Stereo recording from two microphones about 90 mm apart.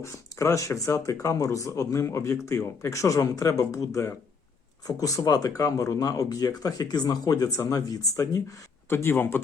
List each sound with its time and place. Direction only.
0.0 s speech: 35° left (ahead or behind)